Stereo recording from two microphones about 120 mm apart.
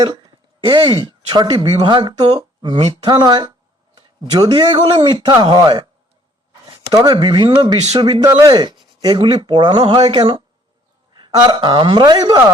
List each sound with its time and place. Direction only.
0.0 s speech: 40° right (ahead or behind)